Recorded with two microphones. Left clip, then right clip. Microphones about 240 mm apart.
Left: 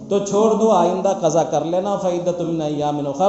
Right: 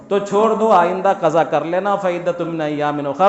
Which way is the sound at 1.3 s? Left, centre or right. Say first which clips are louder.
Right 2 dB; right.